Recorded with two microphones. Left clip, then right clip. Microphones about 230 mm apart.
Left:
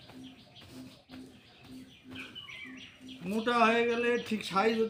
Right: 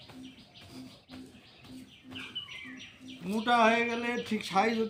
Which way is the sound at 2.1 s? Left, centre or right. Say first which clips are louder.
Right 2 dB; centre.